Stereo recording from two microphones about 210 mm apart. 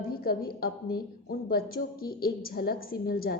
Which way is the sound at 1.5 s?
45° left (ahead or behind).